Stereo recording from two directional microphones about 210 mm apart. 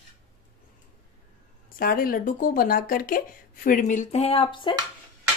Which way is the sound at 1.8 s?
45° left (ahead or behind).